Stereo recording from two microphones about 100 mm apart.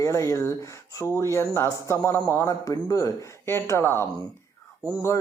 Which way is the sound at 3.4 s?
25° left (ahead or behind).